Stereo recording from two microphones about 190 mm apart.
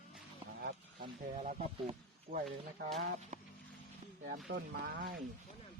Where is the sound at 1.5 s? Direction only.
40° right (ahead or behind).